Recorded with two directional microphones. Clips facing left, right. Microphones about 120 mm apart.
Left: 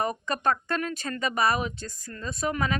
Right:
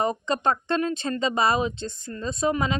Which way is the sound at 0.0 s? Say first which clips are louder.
Right 3 dB; 20° right (ahead or behind).